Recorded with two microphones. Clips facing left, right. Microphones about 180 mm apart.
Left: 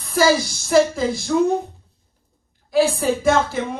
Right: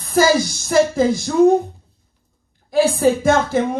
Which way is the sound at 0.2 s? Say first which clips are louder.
Right 2 dB; 50° right (ahead or behind).